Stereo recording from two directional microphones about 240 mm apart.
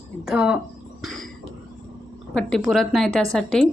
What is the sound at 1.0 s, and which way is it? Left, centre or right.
Cough, centre.